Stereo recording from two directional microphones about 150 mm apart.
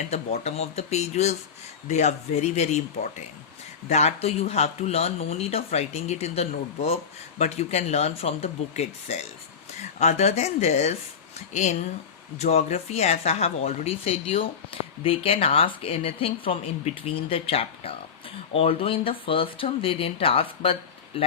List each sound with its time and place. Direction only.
0.1 s speech: 45° left (ahead or behind)